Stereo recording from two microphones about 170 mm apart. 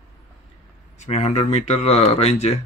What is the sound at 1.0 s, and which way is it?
Speech, 40° left (ahead or behind).